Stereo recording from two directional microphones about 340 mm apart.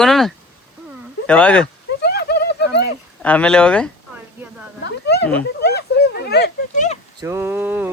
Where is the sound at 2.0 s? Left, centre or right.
Left.